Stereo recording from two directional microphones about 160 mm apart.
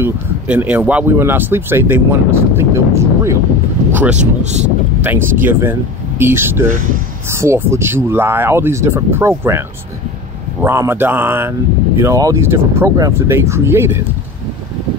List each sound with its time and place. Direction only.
0.0 s speech: 10° right (ahead or behind)
4.2 s speech: 45° right (ahead or behind)
5.0 s speech: 10° right (ahead or behind)